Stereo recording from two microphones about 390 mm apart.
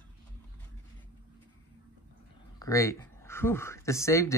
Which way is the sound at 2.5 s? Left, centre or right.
Centre.